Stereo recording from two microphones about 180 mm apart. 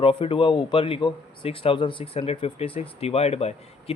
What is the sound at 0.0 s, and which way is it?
Speech, 30° left (ahead or behind).